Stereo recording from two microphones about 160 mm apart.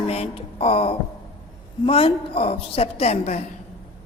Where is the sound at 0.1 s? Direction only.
35° left (ahead or behind).